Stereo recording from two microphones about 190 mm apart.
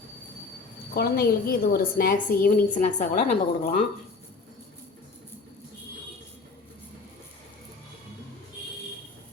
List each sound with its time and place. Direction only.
0.9 s a woman's voice: 55° left (ahead or behind); by 3.8 s 35° left (ahead or behind)